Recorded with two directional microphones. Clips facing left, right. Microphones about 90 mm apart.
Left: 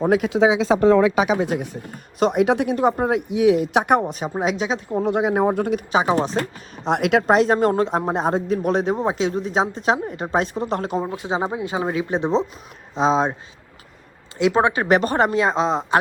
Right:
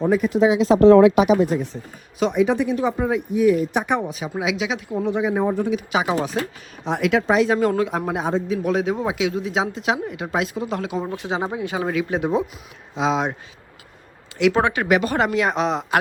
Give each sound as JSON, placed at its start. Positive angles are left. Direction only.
{"t": 0.1, "sound": "speech", "side_deg": 90}
{"t": 1.5, "sound": "speech", "side_deg": 75}
{"t": 2.1, "sound": "speech", "side_deg": 50}
{"t": 2.7, "sound": "speech", "side_deg": 50}
{"t": 4.0, "sound": "speech", "side_deg": 40}
{"t": 5.0, "sound": "speech", "side_deg": 60}
{"t": 5.9, "sound": "speech", "side_deg": 30}
{"t": 6.9, "sound": "speech", "side_deg": 55}
{"t": 8.2, "sound": "speech", "side_deg": 45}
{"t": 11.1, "sound": "speech", "side_deg": 25}
{"t": 14.3, "sound": "speech", "side_deg": 25}
{"t": 14.8, "sound": "speech", "side_deg": 40}
{"t": 15.1, "sound": "speech", "side_deg": 30}